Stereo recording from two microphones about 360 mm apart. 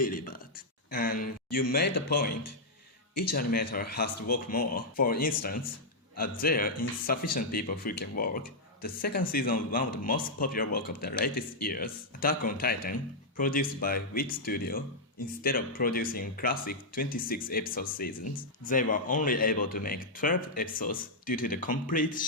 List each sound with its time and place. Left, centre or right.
0.0 s a sound: left
1.7 s speech: left
3.3 s speech: left